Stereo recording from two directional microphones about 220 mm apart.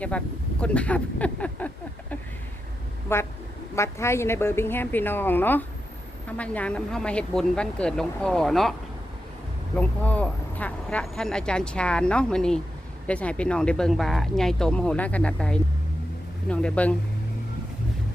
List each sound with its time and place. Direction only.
0.6 s a woman's voice: 5° left (ahead or behind)
9.7 s speech: 5° left (ahead or behind)